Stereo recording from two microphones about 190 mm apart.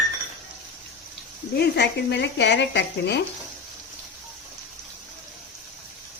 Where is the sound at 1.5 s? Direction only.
60° left (ahead or behind).